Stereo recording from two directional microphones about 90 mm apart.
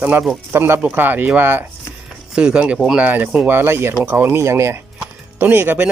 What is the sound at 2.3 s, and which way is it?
Speech, 10° right (ahead or behind).